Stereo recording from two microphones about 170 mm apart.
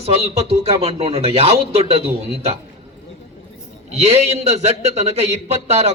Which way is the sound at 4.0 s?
40° right (ahead or behind).